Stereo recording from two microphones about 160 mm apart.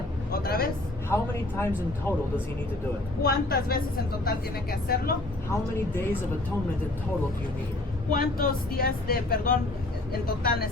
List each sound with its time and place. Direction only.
0.4 s vehicle: 75° left (ahead or behind)
1.1 s speech: 15° left (ahead or behind)
3.2 s speech: 75° left (ahead or behind)
5.5 s speech: 15° left (ahead or behind)
8.1 s speech: 65° left (ahead or behind)